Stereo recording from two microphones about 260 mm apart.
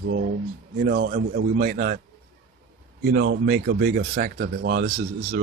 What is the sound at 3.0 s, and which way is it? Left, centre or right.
Speech, right.